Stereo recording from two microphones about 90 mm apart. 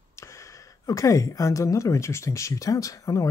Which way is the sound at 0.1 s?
35° left (ahead or behind).